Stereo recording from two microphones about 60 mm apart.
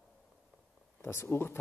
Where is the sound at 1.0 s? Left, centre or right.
Left.